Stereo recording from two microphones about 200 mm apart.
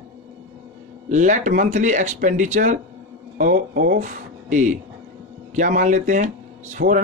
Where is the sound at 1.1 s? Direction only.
40° right (ahead or behind).